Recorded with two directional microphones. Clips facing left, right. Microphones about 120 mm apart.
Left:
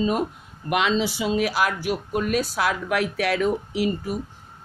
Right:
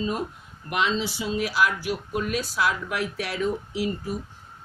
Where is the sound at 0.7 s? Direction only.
90° left.